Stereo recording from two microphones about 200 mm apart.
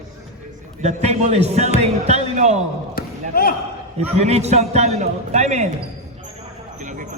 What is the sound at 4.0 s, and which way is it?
A man's voice, 30° right (ahead or behind).